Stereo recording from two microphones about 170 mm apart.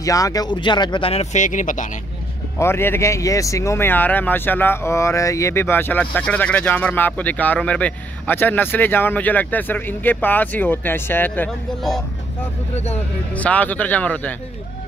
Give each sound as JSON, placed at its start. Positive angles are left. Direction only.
{"t": 0.0, "sound": "speech", "side_deg": 20}
{"t": 2.6, "sound": "speech", "side_deg": 15}
{"t": 13.3, "sound": "speech", "side_deg": 10}